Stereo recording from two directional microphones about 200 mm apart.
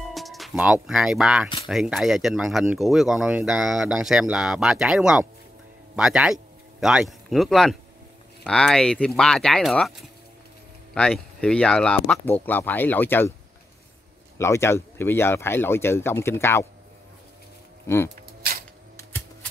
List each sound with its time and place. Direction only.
0.1 s speech: centre (ahead or behind)
11.0 s speech: 5° left (ahead or behind)
14.4 s speech: 15° left (ahead or behind)
17.8 s speech: 10° left (ahead or behind)
18.1 s a sound: 50° right (ahead or behind)